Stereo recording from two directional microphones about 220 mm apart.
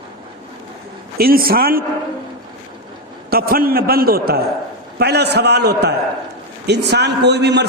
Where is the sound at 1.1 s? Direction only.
40° right (ahead or behind).